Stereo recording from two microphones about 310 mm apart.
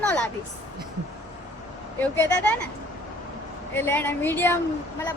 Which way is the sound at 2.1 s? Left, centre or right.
Centre.